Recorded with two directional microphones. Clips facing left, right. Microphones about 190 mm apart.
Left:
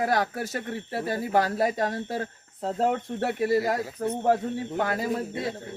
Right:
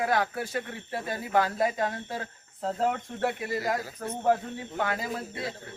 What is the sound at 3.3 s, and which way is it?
Speech, 40° left (ahead or behind).